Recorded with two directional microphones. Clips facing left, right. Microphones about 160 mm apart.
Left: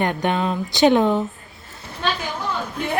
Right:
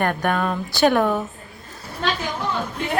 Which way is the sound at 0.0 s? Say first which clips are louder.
Even; 20° left (ahead or behind).